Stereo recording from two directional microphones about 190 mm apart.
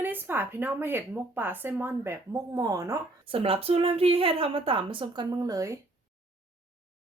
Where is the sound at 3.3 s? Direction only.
30° right (ahead or behind).